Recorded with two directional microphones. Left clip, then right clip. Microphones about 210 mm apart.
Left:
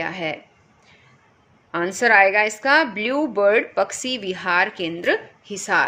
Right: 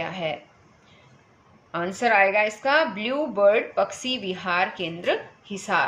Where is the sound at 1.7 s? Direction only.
50° left (ahead or behind).